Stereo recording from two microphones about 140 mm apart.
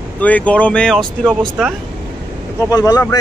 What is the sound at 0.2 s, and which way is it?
Speech, 10° left (ahead or behind).